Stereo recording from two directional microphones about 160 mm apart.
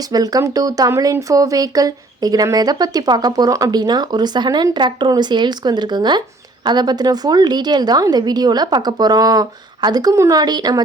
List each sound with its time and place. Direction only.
0.1 s speech: 25° right (ahead or behind)